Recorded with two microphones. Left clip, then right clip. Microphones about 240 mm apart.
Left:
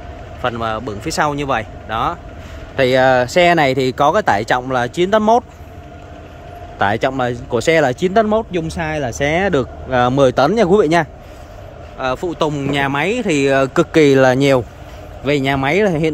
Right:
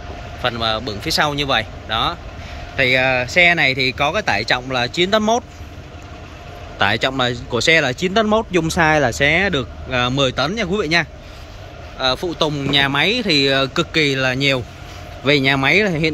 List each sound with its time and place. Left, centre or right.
0.4 s speech: centre
6.8 s speech: centre